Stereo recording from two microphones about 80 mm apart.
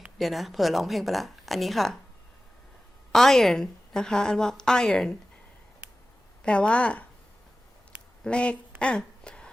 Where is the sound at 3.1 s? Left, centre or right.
Centre.